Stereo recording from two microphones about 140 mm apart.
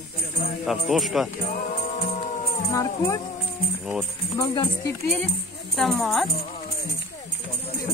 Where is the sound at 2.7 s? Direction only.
25° left (ahead or behind).